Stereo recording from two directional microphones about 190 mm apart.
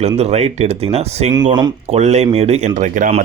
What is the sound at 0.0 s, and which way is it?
Speech, 35° right (ahead or behind).